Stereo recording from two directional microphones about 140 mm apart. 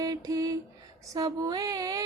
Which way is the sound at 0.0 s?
25° right (ahead or behind).